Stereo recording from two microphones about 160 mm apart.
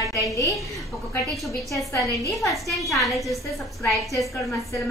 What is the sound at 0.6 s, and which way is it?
A woman's voice, centre (ahead or behind).